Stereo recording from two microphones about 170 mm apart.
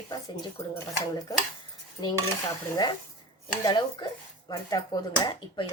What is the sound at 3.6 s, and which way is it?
A woman's voice, 25° left (ahead or behind).